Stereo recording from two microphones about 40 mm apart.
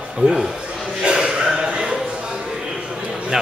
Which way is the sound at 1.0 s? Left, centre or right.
Right.